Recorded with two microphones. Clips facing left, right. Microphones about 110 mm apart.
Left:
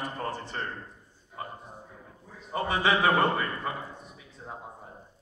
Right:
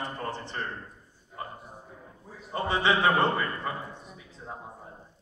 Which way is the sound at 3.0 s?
15° left (ahead or behind).